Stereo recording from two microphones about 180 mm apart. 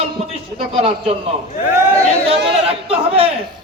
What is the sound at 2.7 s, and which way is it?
Speech, 30° right (ahead or behind).